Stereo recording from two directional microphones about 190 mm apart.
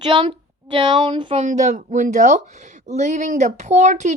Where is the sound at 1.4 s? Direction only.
40° right (ahead or behind).